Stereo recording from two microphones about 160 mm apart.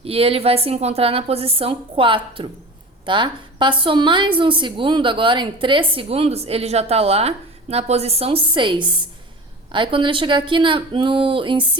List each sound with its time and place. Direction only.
0.0 s a woman's voice: 35° right (ahead or behind)